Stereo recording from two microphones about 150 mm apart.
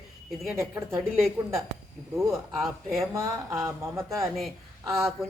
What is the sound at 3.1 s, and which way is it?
Speech, 20° right (ahead or behind).